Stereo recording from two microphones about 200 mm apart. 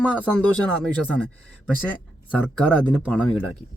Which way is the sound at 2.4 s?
5° left (ahead or behind).